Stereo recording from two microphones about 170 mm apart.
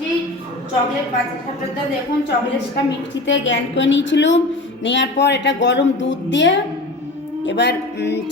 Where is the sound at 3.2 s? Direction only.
90° left.